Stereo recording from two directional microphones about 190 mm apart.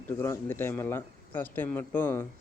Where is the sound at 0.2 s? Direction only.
10° left (ahead or behind).